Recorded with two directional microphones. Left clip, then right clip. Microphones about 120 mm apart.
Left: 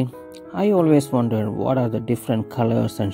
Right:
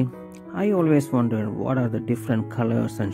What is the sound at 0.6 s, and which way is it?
Speech, 30° left (ahead or behind).